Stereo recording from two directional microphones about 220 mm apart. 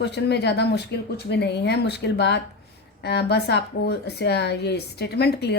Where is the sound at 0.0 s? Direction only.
50° left (ahead or behind).